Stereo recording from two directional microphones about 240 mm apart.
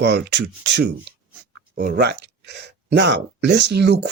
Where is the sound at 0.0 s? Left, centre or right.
Right.